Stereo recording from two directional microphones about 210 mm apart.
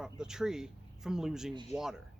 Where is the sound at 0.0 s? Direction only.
5° right (ahead or behind).